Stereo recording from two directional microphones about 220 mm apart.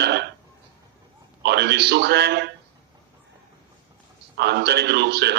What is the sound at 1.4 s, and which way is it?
A man's voice, 50° right (ahead or behind).